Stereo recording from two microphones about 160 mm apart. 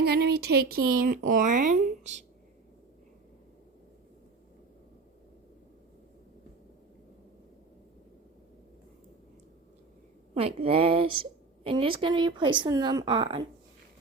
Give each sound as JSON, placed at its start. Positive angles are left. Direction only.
{"t": 0.0, "sound": "speech", "side_deg": -90}
{"t": 10.3, "sound": "a woman's voice", "side_deg": -35}